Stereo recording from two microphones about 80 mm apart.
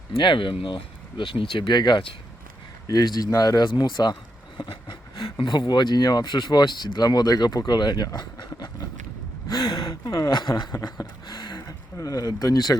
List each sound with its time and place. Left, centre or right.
0.2 s speech: left
2.8 s speech: left